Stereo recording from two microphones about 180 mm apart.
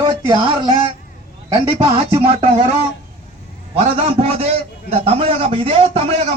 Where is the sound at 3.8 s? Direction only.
35° right (ahead or behind).